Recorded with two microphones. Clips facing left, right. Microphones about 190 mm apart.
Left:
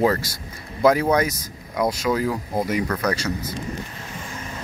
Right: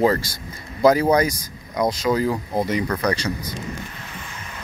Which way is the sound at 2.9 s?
10° right (ahead or behind).